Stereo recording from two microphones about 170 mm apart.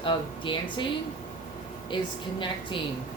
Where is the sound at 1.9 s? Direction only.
30° left (ahead or behind).